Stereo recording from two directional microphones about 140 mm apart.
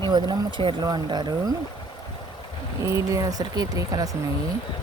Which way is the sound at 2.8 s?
20° right (ahead or behind).